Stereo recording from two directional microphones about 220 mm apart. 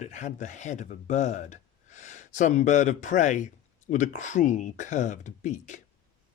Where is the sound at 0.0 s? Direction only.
35° left (ahead or behind).